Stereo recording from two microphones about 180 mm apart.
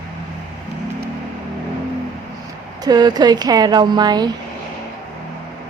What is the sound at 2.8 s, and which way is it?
A woman's voice, 25° right (ahead or behind).